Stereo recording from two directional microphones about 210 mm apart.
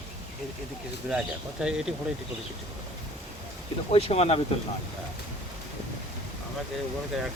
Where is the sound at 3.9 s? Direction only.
30° left (ahead or behind).